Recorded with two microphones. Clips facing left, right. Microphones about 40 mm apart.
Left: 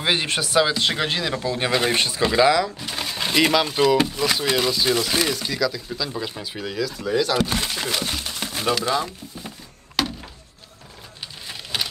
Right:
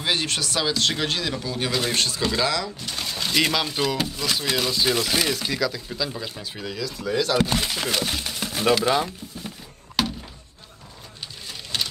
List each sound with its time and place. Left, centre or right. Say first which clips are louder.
0.0 s speech: left 3 dB; left
1.3 s speech: left 4 dB; left; by 4.0 s centre
4.0 s speech: left 4 dB; centre
4.5 s speech: even; centre
6.1 s speech: left 4 dB; centre
8.5 s a sound: right 3 dB; centre
8.8 s speech: right 1 dB; centre
10.0 s thunk: left 1 dB; centre
11.7 s a sound: left 1 dB; centre